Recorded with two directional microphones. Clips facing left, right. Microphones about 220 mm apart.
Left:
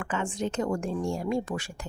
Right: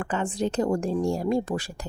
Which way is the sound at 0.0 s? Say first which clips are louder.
Right 3 dB; 35° right (ahead or behind).